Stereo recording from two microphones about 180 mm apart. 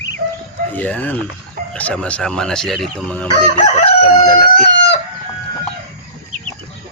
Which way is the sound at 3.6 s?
35° left (ahead or behind).